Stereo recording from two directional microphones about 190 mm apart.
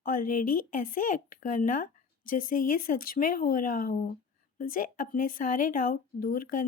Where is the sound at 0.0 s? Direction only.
50° left (ahead or behind).